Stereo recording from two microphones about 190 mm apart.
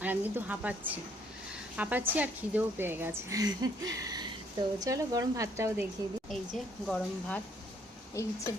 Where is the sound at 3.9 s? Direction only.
20° right (ahead or behind).